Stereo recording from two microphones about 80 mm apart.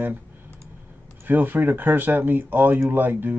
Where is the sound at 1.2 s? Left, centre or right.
Right.